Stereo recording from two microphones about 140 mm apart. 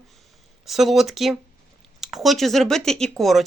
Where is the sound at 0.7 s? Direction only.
Centre (ahead or behind).